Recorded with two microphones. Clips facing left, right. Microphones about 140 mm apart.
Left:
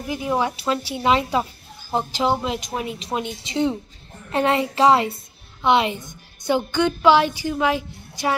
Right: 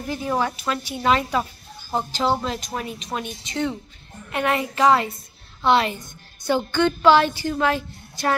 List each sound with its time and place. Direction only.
0.0 s a woman's voice: 15° left (ahead or behind)